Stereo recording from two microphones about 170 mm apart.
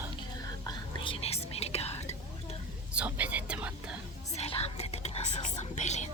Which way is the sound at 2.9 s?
10° right (ahead or behind).